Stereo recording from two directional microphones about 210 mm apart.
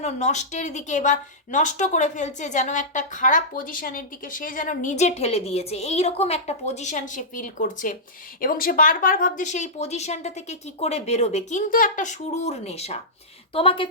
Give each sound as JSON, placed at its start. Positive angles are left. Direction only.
{"t": 0.0, "sound": "a woman's voice", "side_deg": 35}